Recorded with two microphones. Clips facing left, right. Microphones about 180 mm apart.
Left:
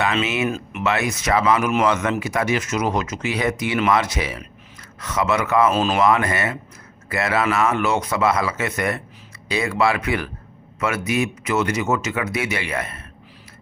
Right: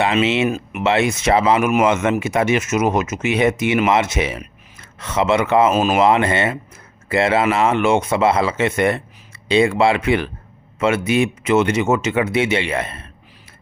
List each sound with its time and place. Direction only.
0.0 s speech: 25° right (ahead or behind)
6.0 s speech: 25° right (ahead or behind)